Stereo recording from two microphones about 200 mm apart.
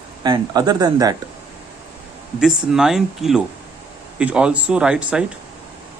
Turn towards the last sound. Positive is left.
turn(degrees=-5)  # may be behind; listen again after turning